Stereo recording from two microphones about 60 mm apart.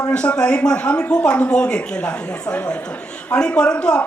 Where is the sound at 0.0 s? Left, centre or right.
Centre.